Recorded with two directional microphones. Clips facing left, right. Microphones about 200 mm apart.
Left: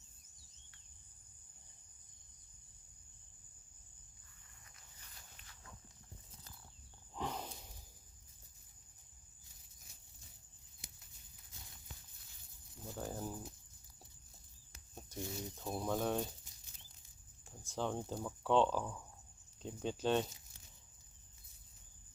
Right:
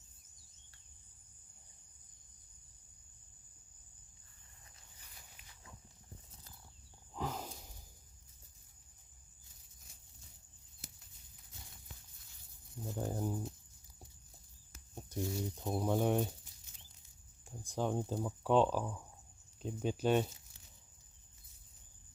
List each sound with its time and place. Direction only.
7.1 s snake: centre (ahead or behind)
12.8 s speech: 15° right (ahead or behind)
14.9 s speech: 15° right (ahead or behind)
17.6 s speech: 15° right (ahead or behind)